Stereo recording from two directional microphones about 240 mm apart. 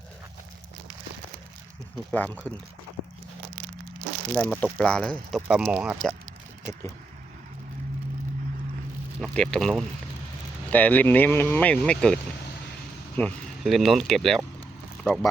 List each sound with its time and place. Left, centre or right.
2.0 s speech: centre
4.4 s speech: centre
9.2 s speech: centre